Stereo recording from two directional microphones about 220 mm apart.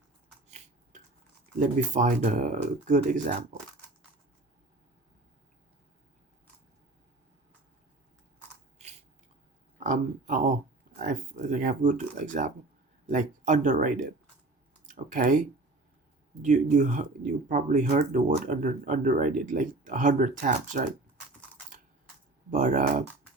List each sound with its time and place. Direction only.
0.4 s a sound: 30° right (ahead or behind)
1.5 s speech: 35° right (ahead or behind)
8.8 s biting: 30° right (ahead or behind)
9.8 s speech: 35° right (ahead or behind)
22.4 s speech: 35° right (ahead or behind)